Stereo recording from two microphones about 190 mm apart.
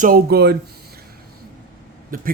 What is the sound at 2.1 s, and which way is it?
Speech, 45° right (ahead or behind).